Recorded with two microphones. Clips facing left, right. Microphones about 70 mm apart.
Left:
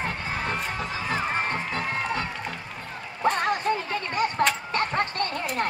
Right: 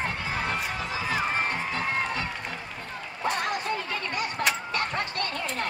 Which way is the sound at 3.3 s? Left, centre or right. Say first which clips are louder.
Left 5 dB; left.